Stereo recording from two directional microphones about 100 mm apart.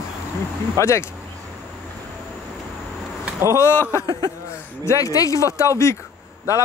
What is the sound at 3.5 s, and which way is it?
Speech, 25° left (ahead or behind).